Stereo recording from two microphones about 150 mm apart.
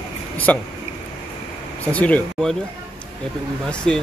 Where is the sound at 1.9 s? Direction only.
10° left (ahead or behind).